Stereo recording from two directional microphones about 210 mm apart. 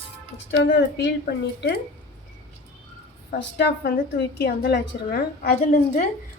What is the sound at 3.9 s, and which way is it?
A woman's voice, 50° left (ahead or behind).